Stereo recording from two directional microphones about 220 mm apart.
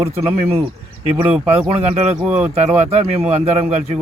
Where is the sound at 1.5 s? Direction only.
30° right (ahead or behind).